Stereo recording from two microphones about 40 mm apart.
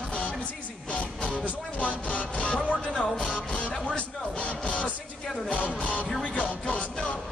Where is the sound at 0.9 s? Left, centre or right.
Left.